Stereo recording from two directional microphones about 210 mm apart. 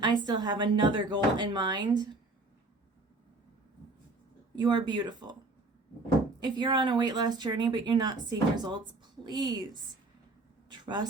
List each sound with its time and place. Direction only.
0.0 s speech: 20° right (ahead or behind)
4.5 s speech: 20° right (ahead or behind)
6.4 s speech: 20° right (ahead or behind)
10.7 s a sound: 20° right (ahead or behind)